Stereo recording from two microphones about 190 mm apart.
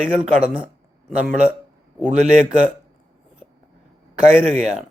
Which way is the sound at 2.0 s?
40° right (ahead or behind).